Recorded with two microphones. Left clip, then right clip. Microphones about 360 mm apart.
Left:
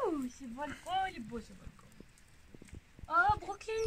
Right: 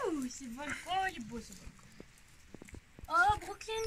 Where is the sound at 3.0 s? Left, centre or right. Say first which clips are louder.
Even; centre.